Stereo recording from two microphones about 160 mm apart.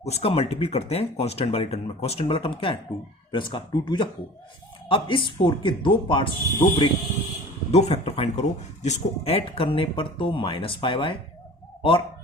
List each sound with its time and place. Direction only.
0.0 s speech: 40° left (ahead or behind)
7.7 s a man's voice: 40° left (ahead or behind)